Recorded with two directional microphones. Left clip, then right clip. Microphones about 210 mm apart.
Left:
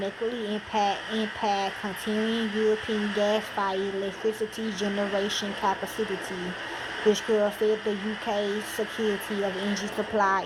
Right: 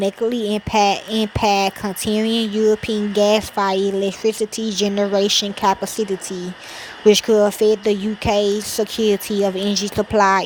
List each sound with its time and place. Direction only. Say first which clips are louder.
0.0 s speech: right 10 dB; 60° right (ahead or behind)
7.1 s speech: right 10 dB; 55° right (ahead or behind)